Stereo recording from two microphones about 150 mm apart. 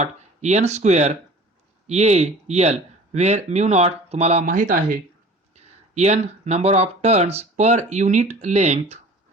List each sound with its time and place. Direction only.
0.0 s speech: 50° right (ahead or behind); by 4.9 s 65° right (ahead or behind)
5.5 s speech: 50° right (ahead or behind)